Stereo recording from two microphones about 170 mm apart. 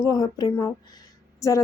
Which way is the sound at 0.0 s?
20° left (ahead or behind).